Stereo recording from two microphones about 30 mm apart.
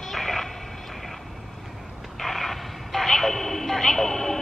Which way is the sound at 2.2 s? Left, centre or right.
Centre.